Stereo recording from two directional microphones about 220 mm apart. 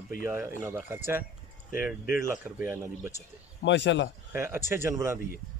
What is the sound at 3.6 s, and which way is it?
Speech, 55° left (ahead or behind).